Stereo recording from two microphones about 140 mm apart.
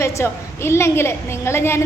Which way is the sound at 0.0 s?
20° left (ahead or behind).